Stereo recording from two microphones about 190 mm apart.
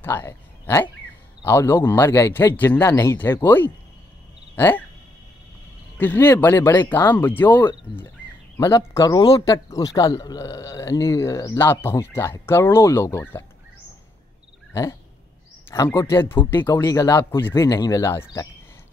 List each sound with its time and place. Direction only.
0.0 s speech: 10° left (ahead or behind)
5.9 s speech: 10° left (ahead or behind)
14.7 s a sound: 15° left (ahead or behind)
15.7 s speech: 15° left (ahead or behind)